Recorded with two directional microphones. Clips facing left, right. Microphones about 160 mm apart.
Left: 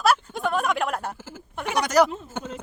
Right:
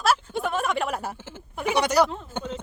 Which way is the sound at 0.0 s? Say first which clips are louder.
Left 2 dB; centre (ahead or behind).